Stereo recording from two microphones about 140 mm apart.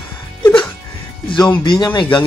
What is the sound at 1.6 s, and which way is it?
Speech, 35° left (ahead or behind).